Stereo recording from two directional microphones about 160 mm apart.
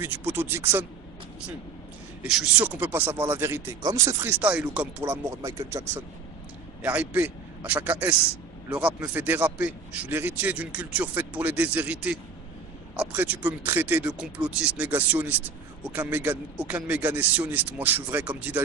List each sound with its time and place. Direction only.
0.0 s speech: 15° right (ahead or behind)
2.2 s speech: 5° right (ahead or behind)
6.8 s speech: 10° right (ahead or behind)